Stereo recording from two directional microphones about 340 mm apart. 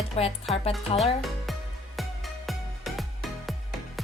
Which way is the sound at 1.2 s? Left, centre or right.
Centre.